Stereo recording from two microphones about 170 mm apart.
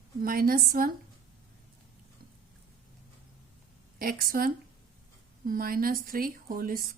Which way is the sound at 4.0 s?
60° right (ahead or behind).